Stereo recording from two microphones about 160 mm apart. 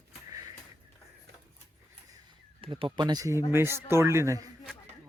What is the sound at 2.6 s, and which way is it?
Speech, 35° right (ahead or behind).